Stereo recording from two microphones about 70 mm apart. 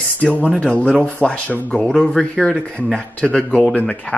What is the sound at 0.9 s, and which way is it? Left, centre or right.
Speech, right.